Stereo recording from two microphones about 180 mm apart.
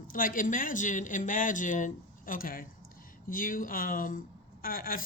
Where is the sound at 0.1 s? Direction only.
50° left (ahead or behind).